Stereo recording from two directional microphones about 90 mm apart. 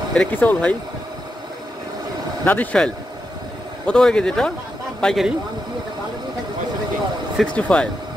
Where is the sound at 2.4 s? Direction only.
15° left (ahead or behind).